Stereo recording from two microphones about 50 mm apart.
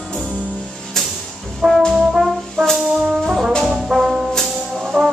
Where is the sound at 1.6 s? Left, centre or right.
Centre.